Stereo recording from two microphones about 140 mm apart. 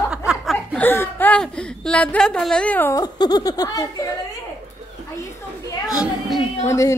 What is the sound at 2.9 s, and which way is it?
Speech, 30° left (ahead or behind).